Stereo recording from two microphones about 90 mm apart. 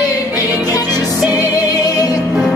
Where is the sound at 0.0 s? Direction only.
40° left (ahead or behind).